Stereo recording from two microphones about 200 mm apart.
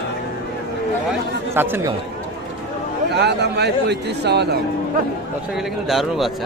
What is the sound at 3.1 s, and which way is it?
Speech, 55° right (ahead or behind).